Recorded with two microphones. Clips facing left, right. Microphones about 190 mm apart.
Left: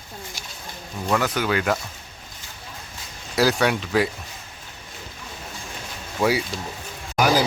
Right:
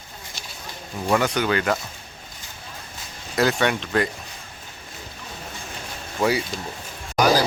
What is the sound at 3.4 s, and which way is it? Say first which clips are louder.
Speech: left 1 dB; centre (ahead or behind).